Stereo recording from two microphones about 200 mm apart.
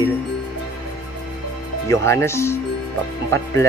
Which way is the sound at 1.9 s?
15° left (ahead or behind).